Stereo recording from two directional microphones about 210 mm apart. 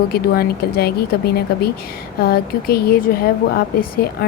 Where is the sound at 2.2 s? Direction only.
45° left (ahead or behind).